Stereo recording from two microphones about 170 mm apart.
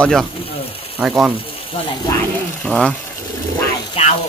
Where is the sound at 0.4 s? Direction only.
35° left (ahead or behind).